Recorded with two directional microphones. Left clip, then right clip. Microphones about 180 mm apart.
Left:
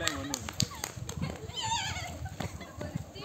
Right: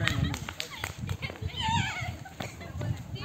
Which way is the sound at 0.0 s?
25° left (ahead or behind).